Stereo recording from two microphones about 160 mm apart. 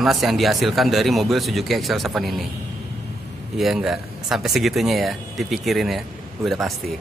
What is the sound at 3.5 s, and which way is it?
Speech, centre (ahead or behind).